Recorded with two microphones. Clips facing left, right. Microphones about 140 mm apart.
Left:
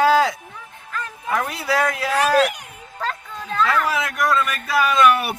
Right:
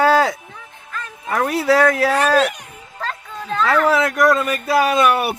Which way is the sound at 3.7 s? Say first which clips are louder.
Right 6 dB; 45° right (ahead or behind).